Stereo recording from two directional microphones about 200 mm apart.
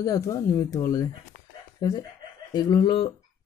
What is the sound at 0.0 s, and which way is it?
Speech, 15° left (ahead or behind).